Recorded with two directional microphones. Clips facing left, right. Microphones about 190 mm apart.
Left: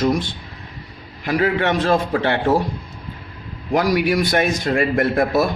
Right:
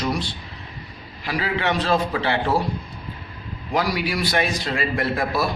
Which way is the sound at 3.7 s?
50° left (ahead or behind).